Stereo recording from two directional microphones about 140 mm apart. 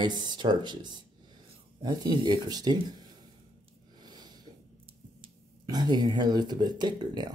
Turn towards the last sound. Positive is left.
turn(degrees=-30)  # may be behind; listen again after turning